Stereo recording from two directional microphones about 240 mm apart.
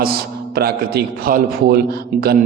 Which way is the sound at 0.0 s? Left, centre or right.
Right.